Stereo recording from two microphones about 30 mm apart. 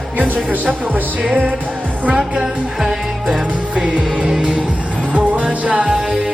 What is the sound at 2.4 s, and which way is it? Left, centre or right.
Music, centre.